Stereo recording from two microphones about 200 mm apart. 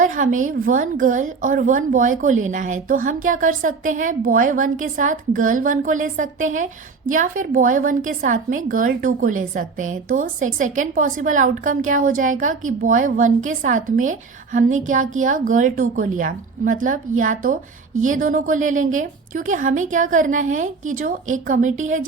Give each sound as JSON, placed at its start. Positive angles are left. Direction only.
{"t": 0.3, "sound": "a woman's voice", "side_deg": -40}